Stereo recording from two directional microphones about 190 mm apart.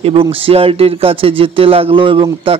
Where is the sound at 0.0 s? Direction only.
30° right (ahead or behind).